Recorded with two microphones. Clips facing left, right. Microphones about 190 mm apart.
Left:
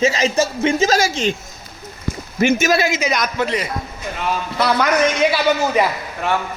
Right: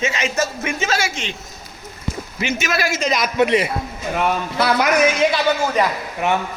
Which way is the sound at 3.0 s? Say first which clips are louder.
Even; centre (ahead or behind).